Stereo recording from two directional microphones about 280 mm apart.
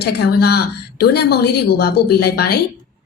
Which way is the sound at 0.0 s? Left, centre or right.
Left.